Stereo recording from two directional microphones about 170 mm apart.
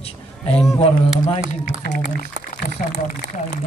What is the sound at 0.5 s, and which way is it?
Speech, 5° left (ahead or behind).